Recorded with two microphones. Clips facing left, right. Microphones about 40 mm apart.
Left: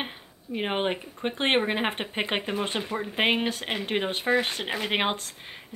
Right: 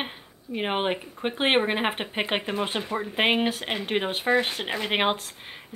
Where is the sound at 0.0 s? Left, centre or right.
Centre.